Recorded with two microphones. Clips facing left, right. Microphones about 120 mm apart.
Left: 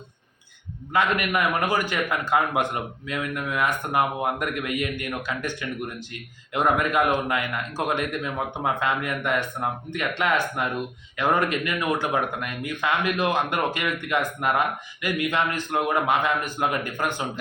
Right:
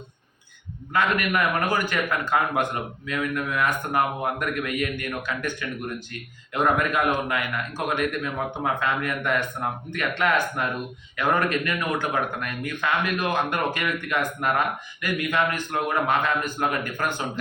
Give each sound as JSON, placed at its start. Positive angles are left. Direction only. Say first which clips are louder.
{"t": 0.9, "sound": "speech", "louder": "even", "side_deg": 20}
{"t": 8.2, "sound": "speech", "louder": "even", "side_deg": 20}